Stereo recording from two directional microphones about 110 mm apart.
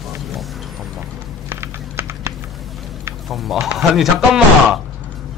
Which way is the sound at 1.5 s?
20° right (ahead or behind).